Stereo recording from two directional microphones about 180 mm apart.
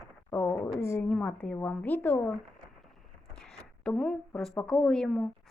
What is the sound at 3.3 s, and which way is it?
Zipper, 5° left (ahead or behind).